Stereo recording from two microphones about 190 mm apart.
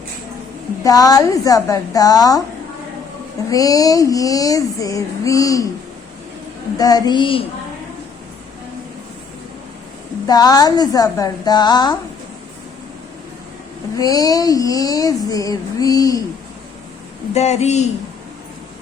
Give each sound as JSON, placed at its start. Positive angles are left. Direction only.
{"t": 0.9, "sound": "speech", "side_deg": 20}
{"t": 3.5, "sound": "a sound", "side_deg": 20}
{"t": 6.7, "sound": "speech", "side_deg": 20}
{"t": 10.2, "sound": "speech", "side_deg": 20}
{"t": 13.9, "sound": "speech", "side_deg": 20}
{"t": 17.3, "sound": "speech", "side_deg": 35}